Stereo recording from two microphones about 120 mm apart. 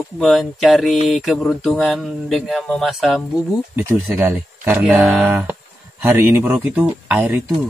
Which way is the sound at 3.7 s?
20° right (ahead or behind).